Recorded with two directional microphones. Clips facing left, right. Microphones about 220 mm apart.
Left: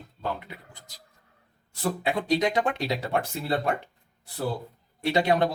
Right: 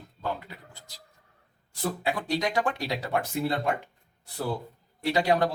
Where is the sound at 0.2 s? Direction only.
20° left (ahead or behind).